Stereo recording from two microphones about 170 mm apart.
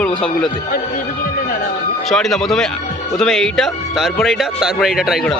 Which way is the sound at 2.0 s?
Centre (ahead or behind).